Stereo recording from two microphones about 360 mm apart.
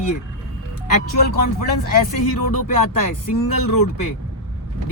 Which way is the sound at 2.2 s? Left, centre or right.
Left.